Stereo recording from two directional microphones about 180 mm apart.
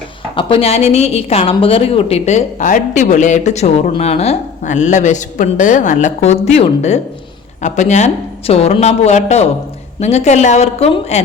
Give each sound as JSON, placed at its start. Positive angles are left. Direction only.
{"t": 0.3, "sound": "a woman's voice", "side_deg": 35}